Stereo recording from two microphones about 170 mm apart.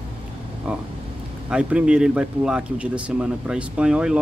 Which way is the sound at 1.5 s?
5° right (ahead or behind).